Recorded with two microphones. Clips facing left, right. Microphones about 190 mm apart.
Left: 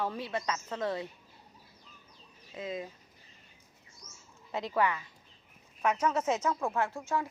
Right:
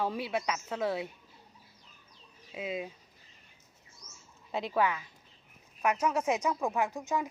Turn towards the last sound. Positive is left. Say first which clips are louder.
# right 1 dB
turn(degrees=-20)  # may be behind; listen again after turning